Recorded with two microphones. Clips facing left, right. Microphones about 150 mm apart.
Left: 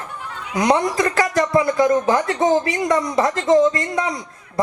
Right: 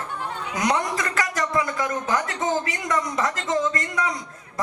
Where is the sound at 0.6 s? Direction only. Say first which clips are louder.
Left 7 dB; 30° left (ahead or behind).